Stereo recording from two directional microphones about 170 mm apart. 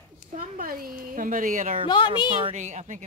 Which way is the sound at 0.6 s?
55° right (ahead or behind).